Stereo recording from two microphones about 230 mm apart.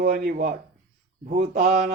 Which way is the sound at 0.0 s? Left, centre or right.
Right.